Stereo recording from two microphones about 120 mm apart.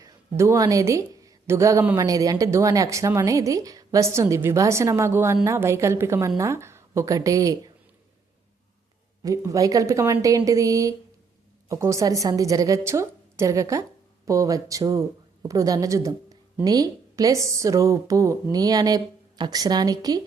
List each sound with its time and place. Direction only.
0.0 s a woman's voice: 25° right (ahead or behind)
9.2 s speech: 25° right (ahead or behind)